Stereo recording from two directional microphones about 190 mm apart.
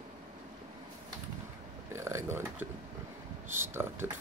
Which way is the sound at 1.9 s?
15° right (ahead or behind).